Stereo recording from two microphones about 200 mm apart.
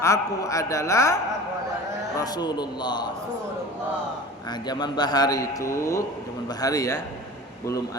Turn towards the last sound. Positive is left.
turn(degrees=15)  # may be behind; listen again after turning